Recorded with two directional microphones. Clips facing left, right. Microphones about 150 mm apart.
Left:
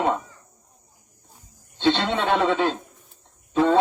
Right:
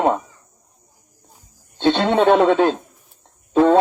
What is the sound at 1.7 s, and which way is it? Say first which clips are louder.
Speech: right 6 dB; 50° right (ahead or behind).